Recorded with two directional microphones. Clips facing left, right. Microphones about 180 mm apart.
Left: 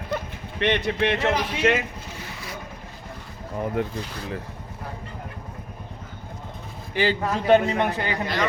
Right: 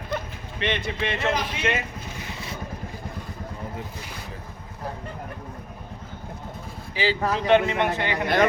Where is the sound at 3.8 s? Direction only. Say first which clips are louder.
Left 10 dB; 70° left (ahead or behind).